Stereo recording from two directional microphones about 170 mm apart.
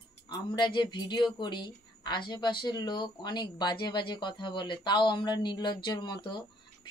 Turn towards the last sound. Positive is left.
turn(degrees=25)  # may be behind; listen again after turning